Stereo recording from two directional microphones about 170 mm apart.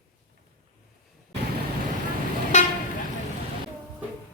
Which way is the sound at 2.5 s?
45° left (ahead or behind).